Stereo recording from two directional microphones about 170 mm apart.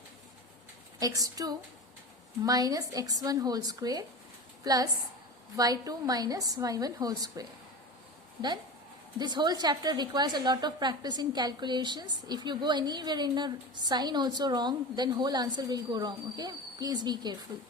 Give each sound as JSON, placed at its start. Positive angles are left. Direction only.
{"t": 0.9, "sound": "a woman's voice", "side_deg": -20}
{"t": 9.1, "sound": "a woman's voice", "side_deg": -25}